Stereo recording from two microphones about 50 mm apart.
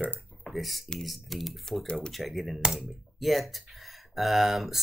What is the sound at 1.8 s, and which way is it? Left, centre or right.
Speech, centre.